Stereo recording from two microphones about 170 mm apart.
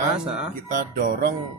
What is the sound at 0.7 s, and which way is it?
Music, 55° right (ahead or behind).